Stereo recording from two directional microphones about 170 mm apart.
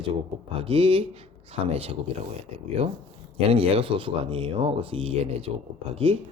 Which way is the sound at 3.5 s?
35° right (ahead or behind).